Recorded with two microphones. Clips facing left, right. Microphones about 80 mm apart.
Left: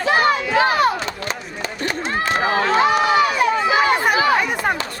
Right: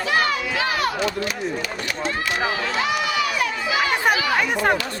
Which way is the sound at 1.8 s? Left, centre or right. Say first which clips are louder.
Left 6 dB; left.